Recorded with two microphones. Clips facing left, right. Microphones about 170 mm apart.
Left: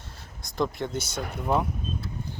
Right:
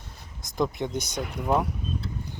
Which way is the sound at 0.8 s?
15° right (ahead or behind).